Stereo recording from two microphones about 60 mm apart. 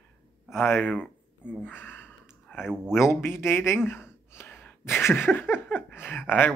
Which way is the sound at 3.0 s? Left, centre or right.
Left.